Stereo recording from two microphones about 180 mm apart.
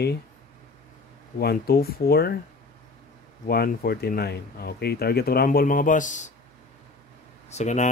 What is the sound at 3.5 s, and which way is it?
Speech, 60° left (ahead or behind).